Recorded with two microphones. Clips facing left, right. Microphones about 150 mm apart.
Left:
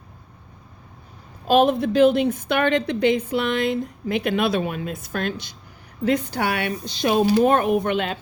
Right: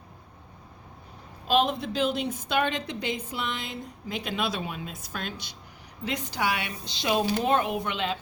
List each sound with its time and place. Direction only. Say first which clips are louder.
1.5 s a woman's voice: left 7 dB; 50° left (ahead or behind)